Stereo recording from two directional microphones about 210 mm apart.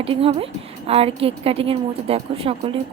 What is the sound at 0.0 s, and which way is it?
A woman's voice, 25° right (ahead or behind).